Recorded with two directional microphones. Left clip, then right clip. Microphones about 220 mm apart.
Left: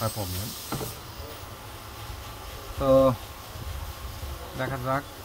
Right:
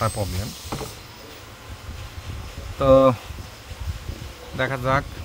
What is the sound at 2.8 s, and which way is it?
Speech, 40° right (ahead or behind).